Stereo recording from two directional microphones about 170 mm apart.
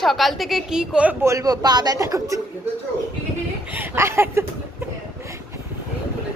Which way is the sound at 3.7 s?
10° right (ahead or behind).